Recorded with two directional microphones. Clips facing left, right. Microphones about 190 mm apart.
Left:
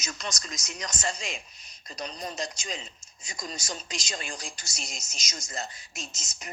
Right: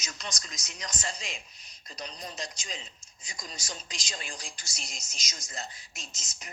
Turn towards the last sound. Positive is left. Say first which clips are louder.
# left 6 dB
turn(degrees=45)  # may be behind; listen again after turning